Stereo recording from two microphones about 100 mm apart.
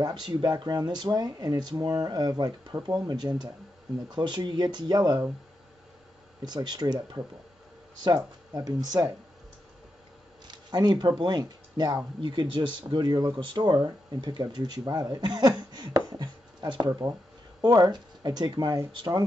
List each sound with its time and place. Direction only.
0.0 s speech: 40° right (ahead or behind)
6.4 s speech: 45° right (ahead or behind)
10.5 s speech: 45° right (ahead or behind)
12.2 s speech: 55° right (ahead or behind)